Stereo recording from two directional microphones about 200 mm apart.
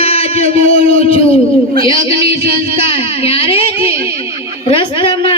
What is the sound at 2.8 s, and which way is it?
Speech, 25° left (ahead or behind).